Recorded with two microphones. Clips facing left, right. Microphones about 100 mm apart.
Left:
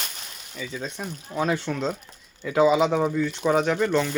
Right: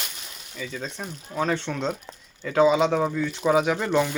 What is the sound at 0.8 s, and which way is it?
Speech, 5° left (ahead or behind).